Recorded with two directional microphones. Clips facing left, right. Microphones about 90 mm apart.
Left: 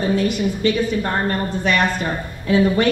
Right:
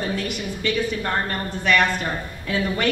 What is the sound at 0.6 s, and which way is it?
Speech, 25° left (ahead or behind).